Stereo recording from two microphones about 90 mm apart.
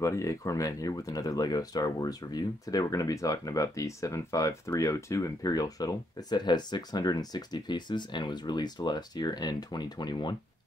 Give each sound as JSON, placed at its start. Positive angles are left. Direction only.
{"t": 0.0, "sound": "speech", "side_deg": 35}